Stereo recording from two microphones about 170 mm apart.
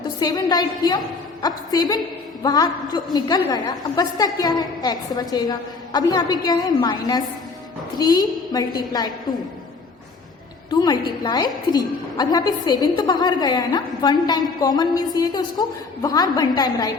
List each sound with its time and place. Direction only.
0.2 s a woman's voice: 25° left (ahead or behind)
10.7 s a woman's voice: 25° left (ahead or behind)